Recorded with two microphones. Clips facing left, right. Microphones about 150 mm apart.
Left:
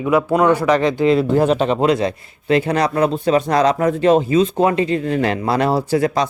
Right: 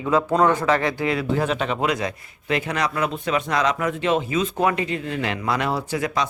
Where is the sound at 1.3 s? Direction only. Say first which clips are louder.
Left 8 dB; 35° left (ahead or behind).